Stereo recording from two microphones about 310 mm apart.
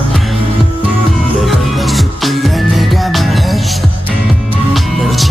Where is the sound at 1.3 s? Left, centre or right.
Centre.